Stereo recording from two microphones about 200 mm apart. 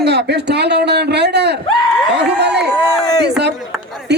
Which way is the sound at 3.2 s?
60° right (ahead or behind).